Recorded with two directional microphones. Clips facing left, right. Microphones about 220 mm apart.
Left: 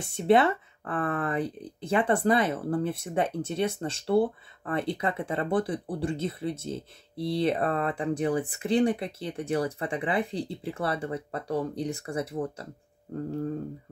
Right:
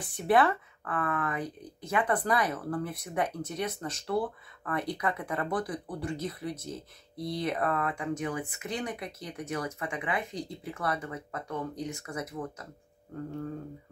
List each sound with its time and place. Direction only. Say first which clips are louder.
0.0 s speech: left 3 dB; 25° left (ahead or behind)